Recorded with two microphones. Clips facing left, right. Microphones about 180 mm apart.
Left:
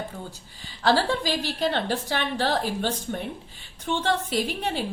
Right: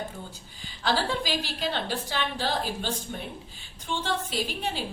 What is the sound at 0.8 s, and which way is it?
A woman's voice, 65° left (ahead or behind).